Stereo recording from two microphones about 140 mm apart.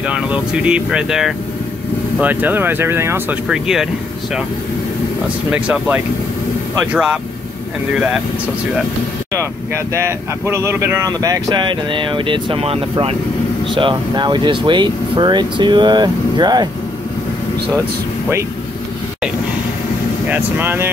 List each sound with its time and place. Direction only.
0.0 s speech: 10° right (ahead or behind)
3.4 s speech: 5° right (ahead or behind)
5.5 s speech: 10° right (ahead or behind)
9.9 s speech: 20° right (ahead or behind)
20.2 s speech: 15° right (ahead or behind)